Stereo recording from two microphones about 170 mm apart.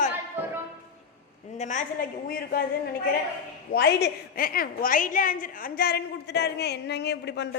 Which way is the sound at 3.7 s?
65° left (ahead or behind).